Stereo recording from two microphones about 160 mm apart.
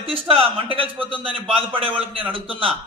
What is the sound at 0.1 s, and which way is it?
A man's voice, 35° right (ahead or behind).